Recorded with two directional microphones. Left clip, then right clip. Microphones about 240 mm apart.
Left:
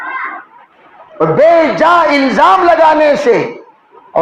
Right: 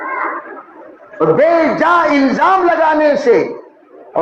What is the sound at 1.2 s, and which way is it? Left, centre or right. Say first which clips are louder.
A man's voice: left 3 dB; left.